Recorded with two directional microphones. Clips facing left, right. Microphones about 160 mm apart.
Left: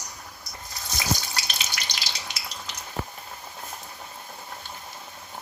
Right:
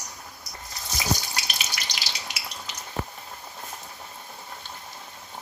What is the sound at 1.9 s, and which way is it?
Frying, 5° right (ahead or behind).